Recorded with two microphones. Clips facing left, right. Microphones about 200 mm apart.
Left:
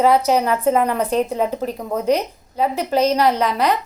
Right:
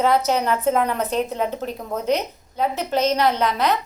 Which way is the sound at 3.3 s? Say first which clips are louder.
Left 2 dB; 35° left (ahead or behind).